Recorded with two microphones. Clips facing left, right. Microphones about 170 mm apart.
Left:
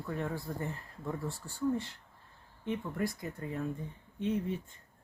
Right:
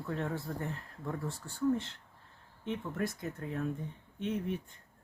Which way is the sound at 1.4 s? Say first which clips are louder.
Even; centre (ahead or behind).